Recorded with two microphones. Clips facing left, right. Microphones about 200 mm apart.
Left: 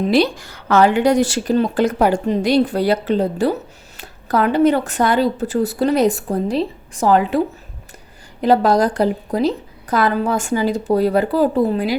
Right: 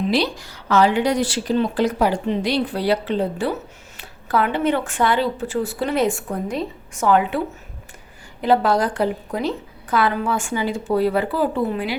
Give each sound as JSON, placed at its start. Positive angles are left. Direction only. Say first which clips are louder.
{"t": 0.0, "sound": "speech", "louder": "left 5 dB", "side_deg": 50}